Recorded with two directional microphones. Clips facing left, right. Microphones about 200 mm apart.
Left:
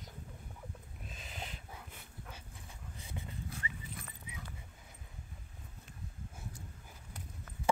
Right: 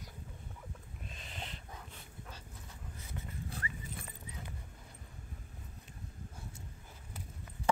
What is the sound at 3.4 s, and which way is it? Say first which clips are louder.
Dog: right 1 dB; 30° right (ahead or behind).